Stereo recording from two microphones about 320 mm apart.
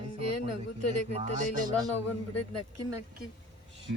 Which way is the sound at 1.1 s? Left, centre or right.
Centre.